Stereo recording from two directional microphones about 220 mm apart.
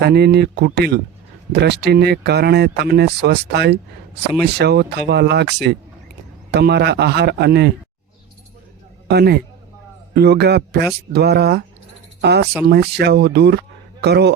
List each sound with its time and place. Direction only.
0.0 s speech: 45° right (ahead or behind)
6.5 s speech: 50° right (ahead or behind)
9.0 s a man's voice: 50° right (ahead or behind)